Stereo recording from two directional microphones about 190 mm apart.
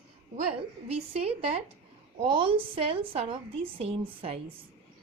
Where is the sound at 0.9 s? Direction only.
35° right (ahead or behind).